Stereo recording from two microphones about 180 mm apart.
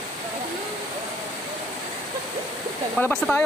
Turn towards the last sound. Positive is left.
turn(degrees=10)  # may be behind; listen again after turning